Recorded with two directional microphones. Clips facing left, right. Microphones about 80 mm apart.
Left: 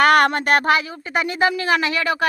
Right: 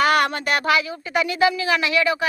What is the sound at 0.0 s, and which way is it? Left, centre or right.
Speech, left.